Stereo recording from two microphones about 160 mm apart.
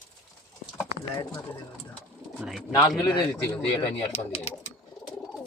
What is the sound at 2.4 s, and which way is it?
Speech, centre (ahead or behind).